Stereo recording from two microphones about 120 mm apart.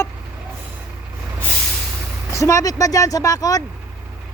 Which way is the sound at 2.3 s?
25° left (ahead or behind).